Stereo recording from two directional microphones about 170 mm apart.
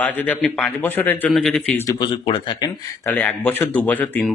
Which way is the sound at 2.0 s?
30° left (ahead or behind).